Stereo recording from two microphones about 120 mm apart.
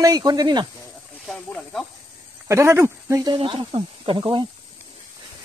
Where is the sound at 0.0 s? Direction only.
35° right (ahead or behind).